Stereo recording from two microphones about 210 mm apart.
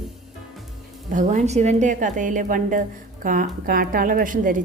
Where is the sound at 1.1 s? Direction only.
35° right (ahead or behind).